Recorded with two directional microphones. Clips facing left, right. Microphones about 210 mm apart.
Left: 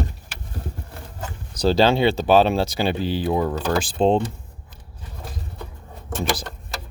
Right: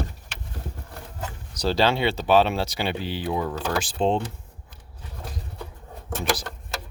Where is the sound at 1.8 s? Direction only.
30° left (ahead or behind).